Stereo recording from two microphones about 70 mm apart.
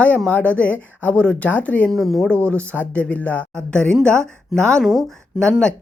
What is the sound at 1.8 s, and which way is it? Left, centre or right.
Speech, centre.